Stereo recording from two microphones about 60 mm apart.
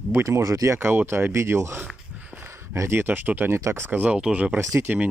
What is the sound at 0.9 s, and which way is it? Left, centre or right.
Speech, right.